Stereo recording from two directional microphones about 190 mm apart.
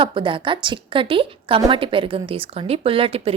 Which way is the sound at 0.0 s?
25° right (ahead or behind).